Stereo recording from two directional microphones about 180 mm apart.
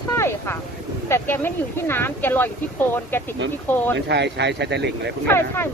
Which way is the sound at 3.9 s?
70° right (ahead or behind).